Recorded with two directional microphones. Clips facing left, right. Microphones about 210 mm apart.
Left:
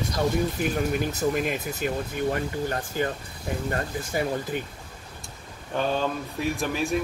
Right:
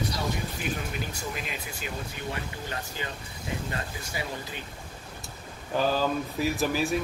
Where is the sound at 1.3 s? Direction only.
50° left (ahead or behind).